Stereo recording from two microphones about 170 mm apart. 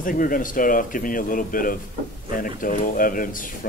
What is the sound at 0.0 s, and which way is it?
Speech, 55° left (ahead or behind).